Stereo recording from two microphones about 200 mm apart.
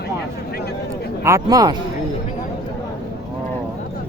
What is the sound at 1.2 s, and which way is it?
Speech, 15° right (ahead or behind).